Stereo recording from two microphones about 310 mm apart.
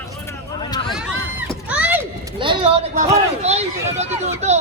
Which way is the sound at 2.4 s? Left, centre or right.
Centre.